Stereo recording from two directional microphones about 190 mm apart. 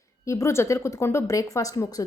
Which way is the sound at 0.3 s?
15° left (ahead or behind).